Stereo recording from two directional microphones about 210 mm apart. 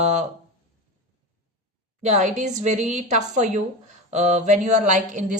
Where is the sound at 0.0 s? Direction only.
35° right (ahead or behind).